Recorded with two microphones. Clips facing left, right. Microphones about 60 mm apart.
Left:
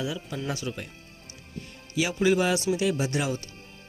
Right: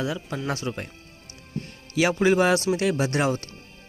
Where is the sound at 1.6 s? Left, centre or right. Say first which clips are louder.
Right 6 dB; right.